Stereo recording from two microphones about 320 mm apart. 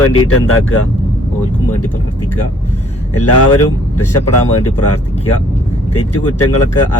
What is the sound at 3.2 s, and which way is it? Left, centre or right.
Speech, left.